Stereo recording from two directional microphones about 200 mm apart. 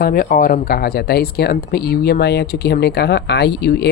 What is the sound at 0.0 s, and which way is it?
Speech, 45° left (ahead or behind).